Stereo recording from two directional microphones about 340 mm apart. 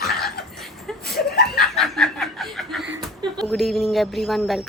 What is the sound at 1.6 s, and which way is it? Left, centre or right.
Snicker, centre.